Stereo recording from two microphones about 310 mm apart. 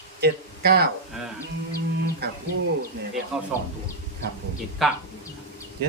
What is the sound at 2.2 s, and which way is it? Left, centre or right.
Speech, right.